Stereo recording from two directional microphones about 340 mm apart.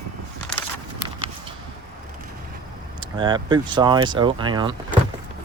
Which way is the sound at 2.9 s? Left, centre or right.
Centre.